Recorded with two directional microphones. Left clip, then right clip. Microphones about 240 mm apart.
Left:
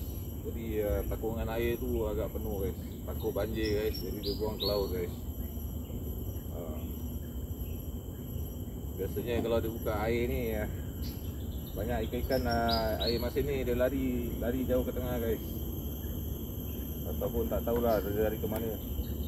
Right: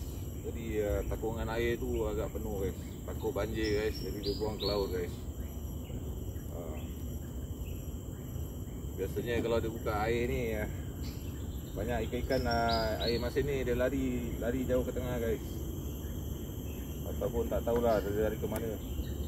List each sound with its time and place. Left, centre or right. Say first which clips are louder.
0.7 s speech: left 1 dB; centre
3.3 s speech: left 1 dB; centre
9.2 s speech: left 1 dB; centre
11.9 s speech: left 1 dB; centre
17.2 s speech: even; centre